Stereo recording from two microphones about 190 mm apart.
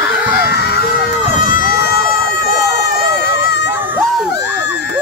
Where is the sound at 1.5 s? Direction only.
50° left (ahead or behind).